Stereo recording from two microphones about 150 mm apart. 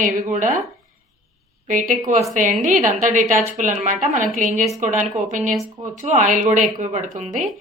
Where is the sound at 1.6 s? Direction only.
55° right (ahead or behind).